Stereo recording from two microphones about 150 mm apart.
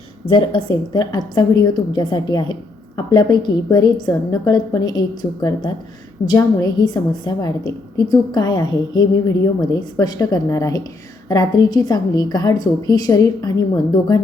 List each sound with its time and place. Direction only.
0.3 s a woman's voice: 30° left (ahead or behind)